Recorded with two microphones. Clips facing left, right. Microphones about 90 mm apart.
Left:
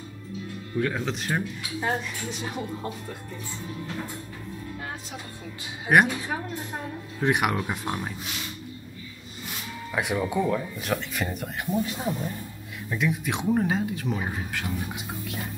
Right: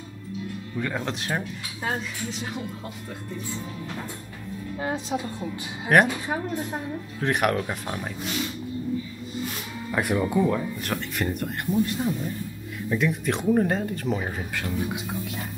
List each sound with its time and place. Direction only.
0.7 s speech: centre (ahead or behind)
5.9 s speech: 5° left (ahead or behind)
7.2 s speech: 5° left (ahead or behind)
9.9 s speech: centre (ahead or behind)